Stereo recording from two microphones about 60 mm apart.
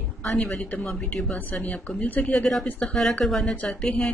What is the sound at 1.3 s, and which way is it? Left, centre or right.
Speech, left.